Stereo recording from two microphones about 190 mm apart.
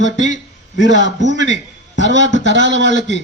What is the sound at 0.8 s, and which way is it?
Speech, 70° left (ahead or behind).